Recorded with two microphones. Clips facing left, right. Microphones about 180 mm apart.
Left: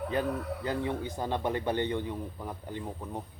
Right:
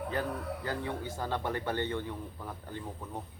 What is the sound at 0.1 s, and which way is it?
A man's voice, 20° left (ahead or behind).